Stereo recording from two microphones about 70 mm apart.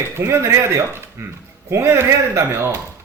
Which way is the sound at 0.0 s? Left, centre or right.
Right.